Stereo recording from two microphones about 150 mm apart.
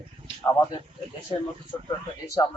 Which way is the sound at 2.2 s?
25° left (ahead or behind).